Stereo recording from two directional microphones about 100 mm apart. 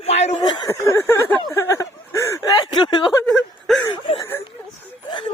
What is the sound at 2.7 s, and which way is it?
Speech, 50° left (ahead or behind).